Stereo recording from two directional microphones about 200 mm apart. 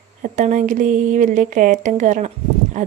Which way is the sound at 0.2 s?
40° right (ahead or behind).